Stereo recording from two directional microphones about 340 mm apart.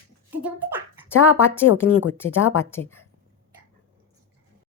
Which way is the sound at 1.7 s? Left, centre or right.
Left.